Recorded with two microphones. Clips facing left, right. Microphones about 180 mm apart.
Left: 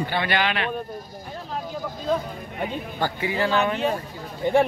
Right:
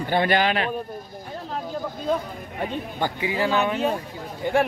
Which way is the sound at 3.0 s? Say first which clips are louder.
Even; 15° right (ahead or behind).